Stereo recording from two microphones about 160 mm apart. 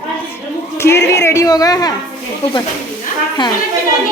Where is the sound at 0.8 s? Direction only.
15° left (ahead or behind).